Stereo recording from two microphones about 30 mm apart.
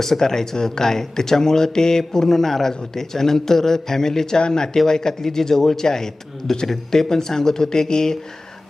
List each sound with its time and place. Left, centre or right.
0.0 s speech: centre